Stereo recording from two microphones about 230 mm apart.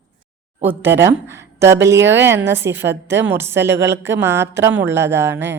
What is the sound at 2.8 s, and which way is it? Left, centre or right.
Speech, right.